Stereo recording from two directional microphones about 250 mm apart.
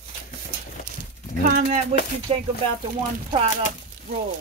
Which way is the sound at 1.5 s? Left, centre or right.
Right.